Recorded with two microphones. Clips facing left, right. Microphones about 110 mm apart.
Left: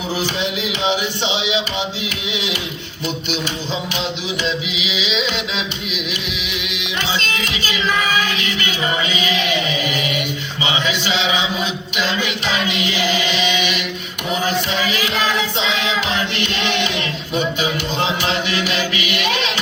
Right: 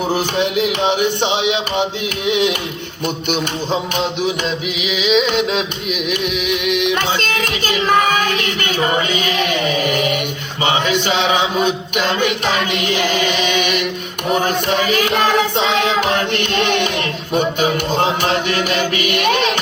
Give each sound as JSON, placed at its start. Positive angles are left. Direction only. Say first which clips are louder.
{"t": 0.3, "sound": "music", "louder": "right 6 dB", "side_deg": -50}